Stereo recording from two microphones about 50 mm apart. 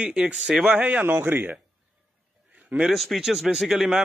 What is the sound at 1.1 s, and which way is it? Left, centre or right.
Speech, right.